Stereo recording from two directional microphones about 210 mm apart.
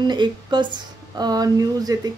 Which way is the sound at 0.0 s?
20° right (ahead or behind).